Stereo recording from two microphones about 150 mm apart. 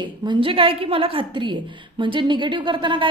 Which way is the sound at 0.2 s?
30° right (ahead or behind).